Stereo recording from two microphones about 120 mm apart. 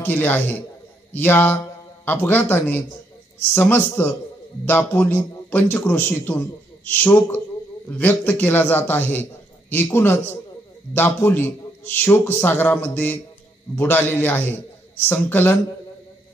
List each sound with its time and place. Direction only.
0.0 s a man's voice: 15° left (ahead or behind)